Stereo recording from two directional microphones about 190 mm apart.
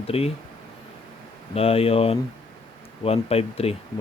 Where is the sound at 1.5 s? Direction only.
30° left (ahead or behind).